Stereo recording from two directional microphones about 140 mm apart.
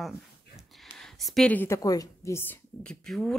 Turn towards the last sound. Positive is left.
turn(degrees=5)  # may be behind; listen again after turning